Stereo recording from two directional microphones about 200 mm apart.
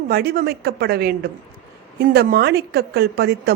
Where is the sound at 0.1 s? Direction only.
50° right (ahead or behind).